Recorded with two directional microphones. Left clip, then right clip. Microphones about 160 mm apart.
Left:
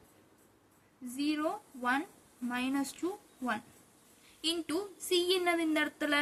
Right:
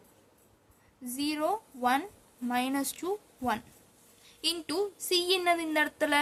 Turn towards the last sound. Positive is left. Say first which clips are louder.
# right 4 dB
turn(degrees=-90)